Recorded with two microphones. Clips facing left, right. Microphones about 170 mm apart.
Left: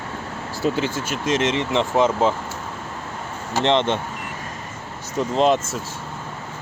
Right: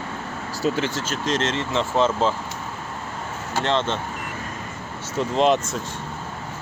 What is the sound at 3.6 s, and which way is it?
Speech, 20° left (ahead or behind).